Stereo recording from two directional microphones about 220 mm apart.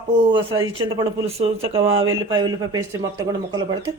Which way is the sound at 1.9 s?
65° right (ahead or behind).